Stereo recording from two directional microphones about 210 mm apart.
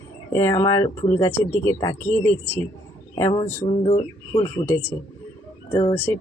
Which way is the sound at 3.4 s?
10° left (ahead or behind).